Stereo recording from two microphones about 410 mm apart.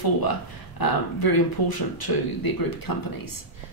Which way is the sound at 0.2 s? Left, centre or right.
Left.